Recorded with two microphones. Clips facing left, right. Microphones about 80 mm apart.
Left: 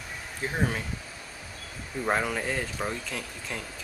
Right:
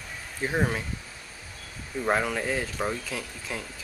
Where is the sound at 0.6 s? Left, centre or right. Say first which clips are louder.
Right 2 dB; centre.